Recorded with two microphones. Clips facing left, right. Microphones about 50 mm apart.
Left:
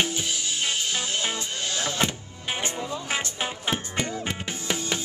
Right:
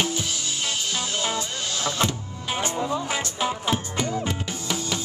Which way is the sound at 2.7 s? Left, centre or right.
Right.